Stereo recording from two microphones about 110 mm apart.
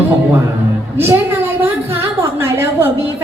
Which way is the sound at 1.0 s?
20° right (ahead or behind).